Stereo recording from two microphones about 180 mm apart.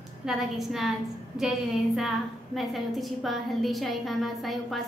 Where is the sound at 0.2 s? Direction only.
Centre (ahead or behind).